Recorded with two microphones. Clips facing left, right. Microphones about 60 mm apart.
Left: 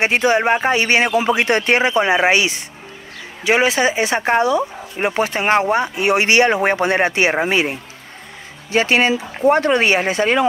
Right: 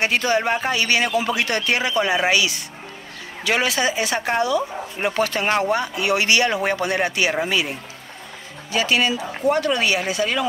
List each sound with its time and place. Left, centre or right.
0.0 s speech: left
8.7 s speech: left